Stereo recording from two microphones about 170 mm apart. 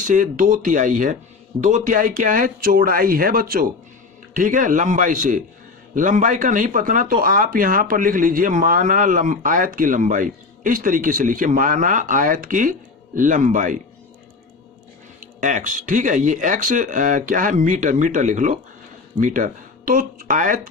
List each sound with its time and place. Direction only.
0.0 s speech: 50° right (ahead or behind)
15.4 s speech: 50° right (ahead or behind)